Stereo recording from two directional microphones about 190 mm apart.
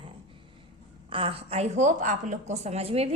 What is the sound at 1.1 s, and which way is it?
A woman's voice, 30° right (ahead or behind).